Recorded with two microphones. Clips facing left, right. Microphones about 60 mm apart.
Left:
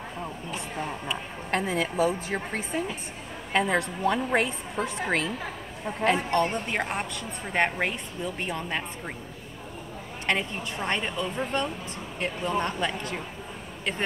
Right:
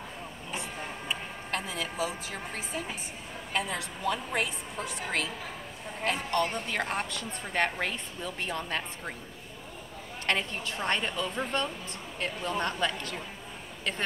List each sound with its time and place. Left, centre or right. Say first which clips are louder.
1.5 s a woman's voice: left 8 dB; left
6.9 s speech: left 1 dB; centre
7.5 s a woman's voice: left 4 dB; centre
10.2 s a woman's voice: left 2 dB; centre